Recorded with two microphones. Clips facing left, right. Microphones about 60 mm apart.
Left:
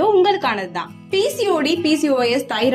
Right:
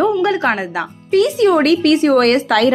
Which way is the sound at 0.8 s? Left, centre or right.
Right.